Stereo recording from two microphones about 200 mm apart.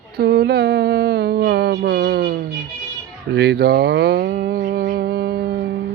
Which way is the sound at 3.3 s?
55° right (ahead or behind).